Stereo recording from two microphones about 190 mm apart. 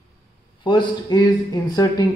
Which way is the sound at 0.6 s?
25° left (ahead or behind).